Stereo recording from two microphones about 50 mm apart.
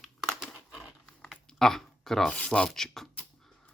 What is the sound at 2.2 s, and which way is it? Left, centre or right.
Speech, left.